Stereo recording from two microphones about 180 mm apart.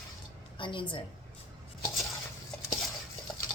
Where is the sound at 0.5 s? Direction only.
30° left (ahead or behind).